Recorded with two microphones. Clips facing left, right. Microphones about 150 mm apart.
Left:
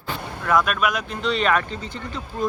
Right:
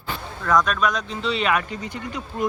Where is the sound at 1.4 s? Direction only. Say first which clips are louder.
Left 2 dB; 10° right (ahead or behind).